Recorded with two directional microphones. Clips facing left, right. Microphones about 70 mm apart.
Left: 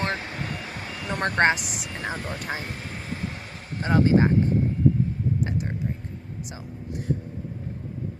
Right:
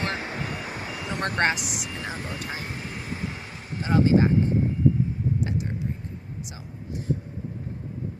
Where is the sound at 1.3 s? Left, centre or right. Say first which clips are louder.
Left 4 dB; left.